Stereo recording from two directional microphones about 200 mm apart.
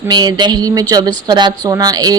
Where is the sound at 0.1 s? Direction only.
20° right (ahead or behind).